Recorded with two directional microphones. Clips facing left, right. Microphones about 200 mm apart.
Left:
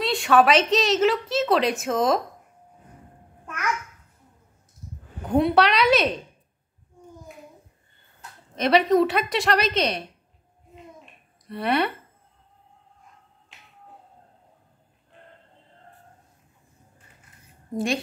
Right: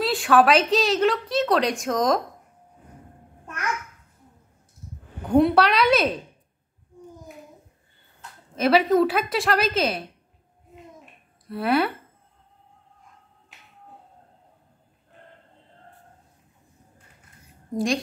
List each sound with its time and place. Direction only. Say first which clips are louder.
0.0 s a woman's voice: even; centre (ahead or behind)
5.2 s a woman's voice: right 2 dB; centre (ahead or behind)
8.5 s a woman's voice: even; centre (ahead or behind)
11.4 s a woman's voice: right 2 dB; centre (ahead or behind)
17.6 s a woman's voice: right 1 dB; centre (ahead or behind)